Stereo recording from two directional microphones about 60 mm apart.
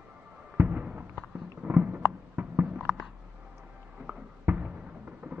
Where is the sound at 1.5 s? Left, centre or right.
Right.